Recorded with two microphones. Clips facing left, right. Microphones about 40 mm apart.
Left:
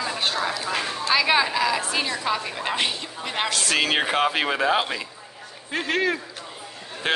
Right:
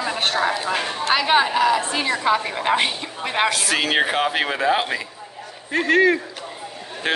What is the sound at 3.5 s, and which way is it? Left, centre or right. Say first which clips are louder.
Speech: right 2 dB; centre.